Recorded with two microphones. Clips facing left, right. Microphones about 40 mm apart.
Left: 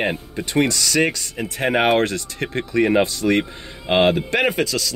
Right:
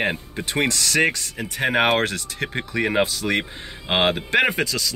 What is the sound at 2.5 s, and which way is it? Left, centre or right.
Speech, centre.